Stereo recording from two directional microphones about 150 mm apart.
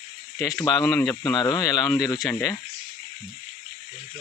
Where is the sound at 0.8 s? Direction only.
10° left (ahead or behind).